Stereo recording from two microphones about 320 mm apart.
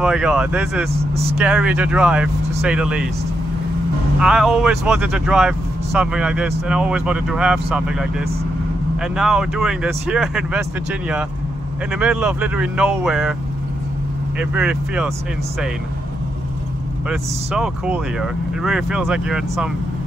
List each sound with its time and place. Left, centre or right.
0.0 s speech: centre
0.9 s speech: centre
1.4 s speech: centre
4.2 s speech: centre
11.9 s speech: centre
14.4 s speech: centre
17.1 s speech: centre